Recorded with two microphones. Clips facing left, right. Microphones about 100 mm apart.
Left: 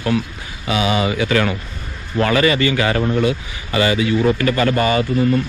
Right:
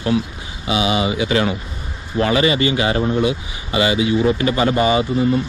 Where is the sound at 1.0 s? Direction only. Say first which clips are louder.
Even; 20° right (ahead or behind).